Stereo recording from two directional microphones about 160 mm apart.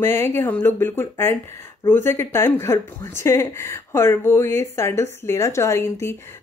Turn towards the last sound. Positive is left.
turn(degrees=15)  # may be behind; listen again after turning